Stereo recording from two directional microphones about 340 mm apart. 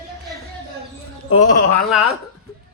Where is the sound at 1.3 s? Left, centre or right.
Left.